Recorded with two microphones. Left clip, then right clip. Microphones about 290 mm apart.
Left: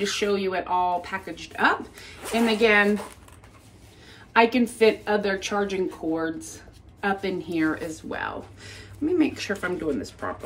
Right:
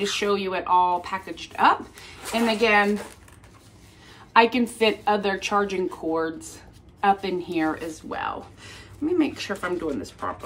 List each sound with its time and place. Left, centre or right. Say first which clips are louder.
0.0 s speech: even; centre
4.3 s a woman's voice: right 1 dB; centre